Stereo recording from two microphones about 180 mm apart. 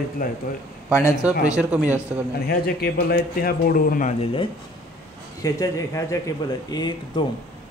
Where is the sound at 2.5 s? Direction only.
55° left (ahead or behind).